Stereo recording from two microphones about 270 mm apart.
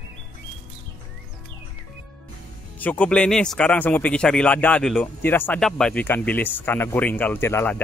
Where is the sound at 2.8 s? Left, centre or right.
Centre.